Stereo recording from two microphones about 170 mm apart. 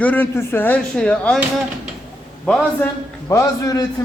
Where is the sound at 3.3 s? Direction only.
20° left (ahead or behind).